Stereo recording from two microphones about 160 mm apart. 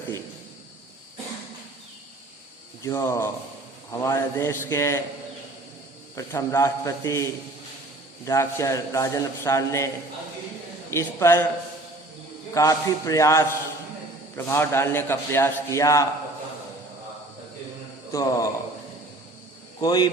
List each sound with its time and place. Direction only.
2.8 s a man's voice: 20° left (ahead or behind)
6.1 s a man's voice: 20° left (ahead or behind)
10.9 s a man's voice: 15° left (ahead or behind)
12.5 s a man's voice: 20° left (ahead or behind)
18.1 s a man's voice: 20° left (ahead or behind)
19.8 s a man's voice: 25° left (ahead or behind)